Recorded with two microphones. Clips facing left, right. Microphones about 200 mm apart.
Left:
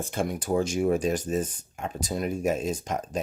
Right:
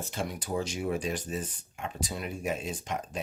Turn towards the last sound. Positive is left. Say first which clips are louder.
# left 5 dB
turn(degrees=40)  # may be behind; listen again after turning